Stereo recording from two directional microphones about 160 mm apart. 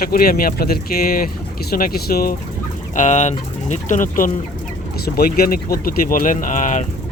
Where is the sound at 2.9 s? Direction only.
50° left (ahead or behind).